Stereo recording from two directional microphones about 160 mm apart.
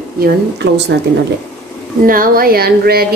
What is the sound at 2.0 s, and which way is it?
Speech, 60° right (ahead or behind).